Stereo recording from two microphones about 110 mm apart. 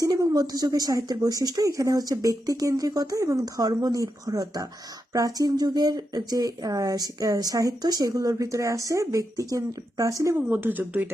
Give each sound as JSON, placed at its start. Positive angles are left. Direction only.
{"t": 0.0, "sound": "speech", "side_deg": -35}
{"t": 10.3, "sound": "speech", "side_deg": -15}